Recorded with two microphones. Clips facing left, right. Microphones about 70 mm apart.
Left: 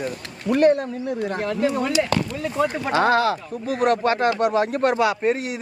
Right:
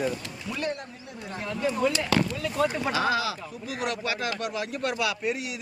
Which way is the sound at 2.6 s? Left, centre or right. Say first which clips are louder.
Left 2 dB; centre.